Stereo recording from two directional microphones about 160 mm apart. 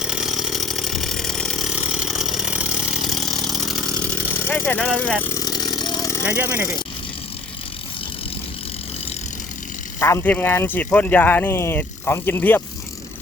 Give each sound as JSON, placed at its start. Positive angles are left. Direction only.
{"t": 0.0, "sound": "chainsaw", "side_deg": -5}
{"t": 4.0, "sound": "chainsaw", "side_deg": 10}
{"t": 5.3, "sound": "a sound", "side_deg": 20}
{"t": 5.7, "sound": "chainsaw", "side_deg": 25}
{"t": 6.2, "sound": "speech", "side_deg": -10}
{"t": 10.0, "sound": "speech", "side_deg": 15}